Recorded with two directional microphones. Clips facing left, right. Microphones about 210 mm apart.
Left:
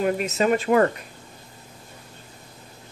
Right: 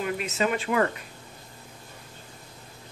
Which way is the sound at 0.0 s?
45° left (ahead or behind).